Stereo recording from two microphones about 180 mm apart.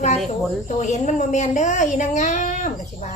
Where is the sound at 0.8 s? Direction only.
40° left (ahead or behind).